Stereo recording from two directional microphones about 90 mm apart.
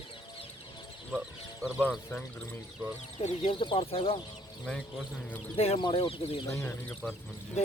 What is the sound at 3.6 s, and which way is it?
Speech, 75° left (ahead or behind).